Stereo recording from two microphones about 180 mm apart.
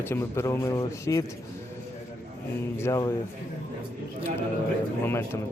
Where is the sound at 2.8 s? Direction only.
20° left (ahead or behind).